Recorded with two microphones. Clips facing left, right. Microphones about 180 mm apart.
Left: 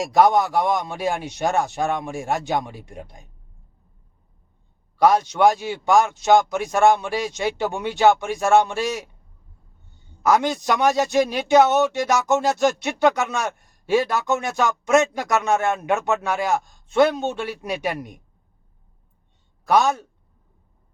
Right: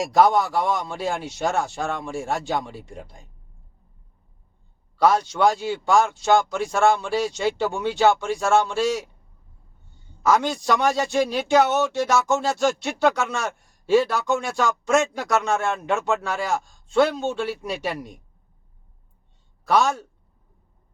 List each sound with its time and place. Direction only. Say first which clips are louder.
0.0 s a man's voice: left 1 dB; centre (ahead or behind)
0.3 s a man's voice: left 2 dB; 20° left (ahead or behind)
4.9 s a man's voice: left 2 dB; 20° left (ahead or behind)
10.2 s a man's voice: left 1 dB; 15° left (ahead or behind)
19.6 s a man's voice: left 2 dB; 20° left (ahead or behind)